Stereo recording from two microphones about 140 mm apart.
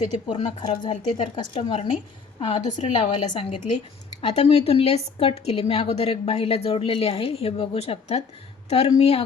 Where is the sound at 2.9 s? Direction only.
40° left (ahead or behind).